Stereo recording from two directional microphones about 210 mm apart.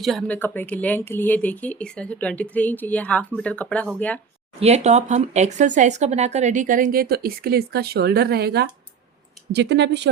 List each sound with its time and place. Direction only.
0.0 s speech: centre (ahead or behind)
4.6 s speech: 30° right (ahead or behind); by 10.1 s 55° right (ahead or behind)